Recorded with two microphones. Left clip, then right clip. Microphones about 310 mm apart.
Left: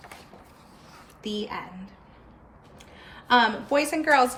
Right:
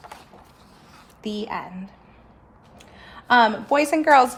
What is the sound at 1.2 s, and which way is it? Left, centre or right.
A woman's voice, right.